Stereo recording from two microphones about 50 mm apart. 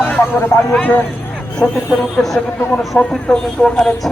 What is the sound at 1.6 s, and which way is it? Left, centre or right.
Speech, centre.